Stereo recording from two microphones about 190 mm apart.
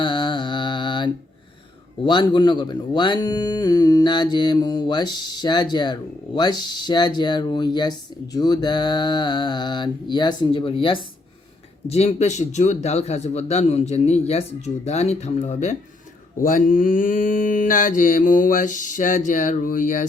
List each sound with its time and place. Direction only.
0.0 s mantra: 25° left (ahead or behind)
2.0 s a man's voice: 25° left (ahead or behind)
16.4 s mantra: 45° left (ahead or behind)